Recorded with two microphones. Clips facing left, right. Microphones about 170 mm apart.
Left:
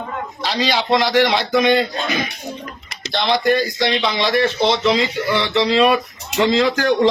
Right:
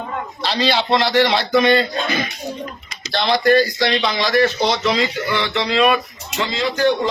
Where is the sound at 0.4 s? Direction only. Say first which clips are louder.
Right 1 dB; 10° left (ahead or behind); by 6.0 s 30° left (ahead or behind).